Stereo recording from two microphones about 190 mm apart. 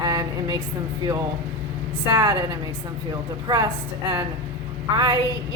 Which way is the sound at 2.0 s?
20° right (ahead or behind).